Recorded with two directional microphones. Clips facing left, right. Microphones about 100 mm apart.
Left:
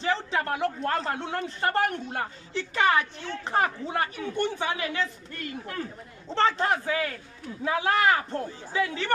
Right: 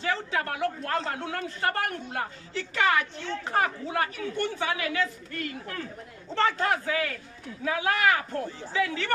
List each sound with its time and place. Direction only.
0.0 s a woman's voice: 25° left (ahead or behind)
6.3 s a woman's voice: 25° left (ahead or behind)